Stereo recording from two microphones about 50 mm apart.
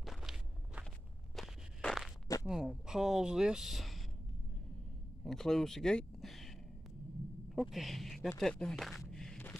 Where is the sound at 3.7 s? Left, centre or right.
Centre.